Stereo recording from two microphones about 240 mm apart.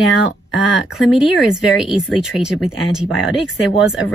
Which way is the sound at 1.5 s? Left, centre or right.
Centre.